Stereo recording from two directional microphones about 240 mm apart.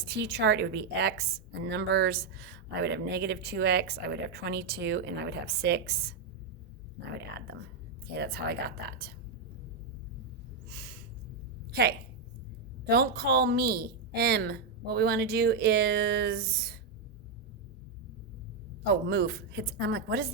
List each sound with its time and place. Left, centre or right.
0.2 s speech: right
7.2 s a woman's voice: right
10.7 s a sound: right
11.7 s a woman's voice: right
19.0 s speech: right